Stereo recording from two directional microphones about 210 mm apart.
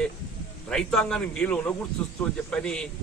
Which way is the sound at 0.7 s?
5° left (ahead or behind).